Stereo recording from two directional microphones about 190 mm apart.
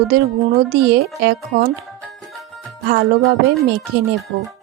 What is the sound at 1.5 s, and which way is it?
Music, 50° right (ahead or behind).